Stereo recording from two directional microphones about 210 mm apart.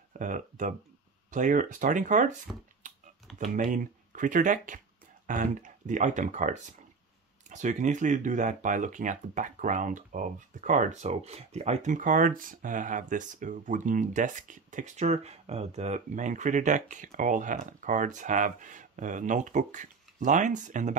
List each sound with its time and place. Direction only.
0.2 s speech: 35° right (ahead or behind)
2.8 s a sound: 35° right (ahead or behind)
3.5 s speech: 40° right (ahead or behind)